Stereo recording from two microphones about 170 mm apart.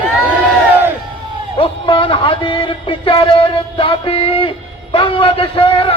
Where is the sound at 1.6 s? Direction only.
30° left (ahead or behind).